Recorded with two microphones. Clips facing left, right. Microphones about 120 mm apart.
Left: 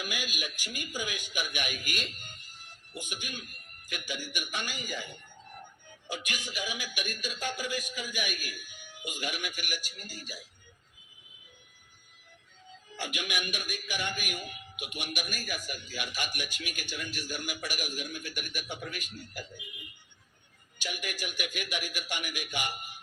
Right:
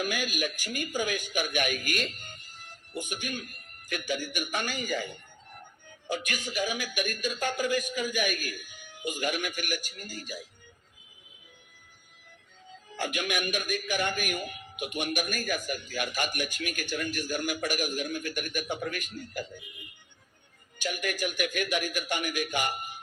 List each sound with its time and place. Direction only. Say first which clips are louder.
0.0 s a man's voice: right 7 dB; 45° right (ahead or behind)
13.0 s a man's voice: right 5 dB; 45° right (ahead or behind)
20.7 s a man's voice: right 6 dB; 50° right (ahead or behind)